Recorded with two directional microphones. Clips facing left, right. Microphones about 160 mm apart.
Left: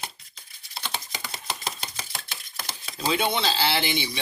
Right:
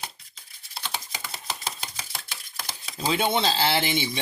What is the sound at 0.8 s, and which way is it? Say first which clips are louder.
Typewriter: left 1 dB; 5° right (ahead or behind).